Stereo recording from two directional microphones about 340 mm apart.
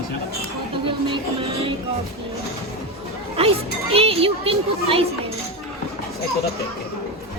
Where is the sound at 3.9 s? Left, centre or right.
Centre.